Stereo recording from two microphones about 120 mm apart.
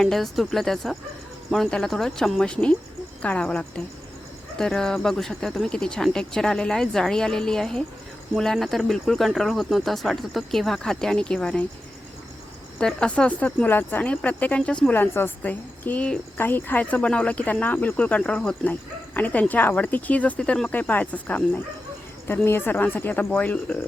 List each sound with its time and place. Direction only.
0.0 s speech: centre (ahead or behind)
12.8 s speech: 10° left (ahead or behind)